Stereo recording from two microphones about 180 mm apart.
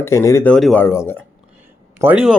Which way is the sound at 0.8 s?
15° left (ahead or behind).